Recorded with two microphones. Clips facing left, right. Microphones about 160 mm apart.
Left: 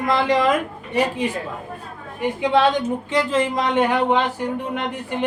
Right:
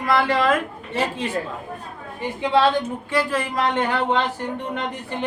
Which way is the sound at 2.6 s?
20° left (ahead or behind).